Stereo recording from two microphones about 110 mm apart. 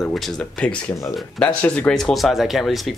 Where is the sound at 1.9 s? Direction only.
Centre (ahead or behind).